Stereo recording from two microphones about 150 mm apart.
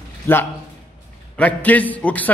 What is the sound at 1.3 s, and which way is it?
Speech, 10° left (ahead or behind).